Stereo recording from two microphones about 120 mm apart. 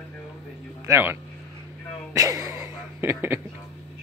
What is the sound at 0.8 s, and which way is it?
Speech, 20° right (ahead or behind).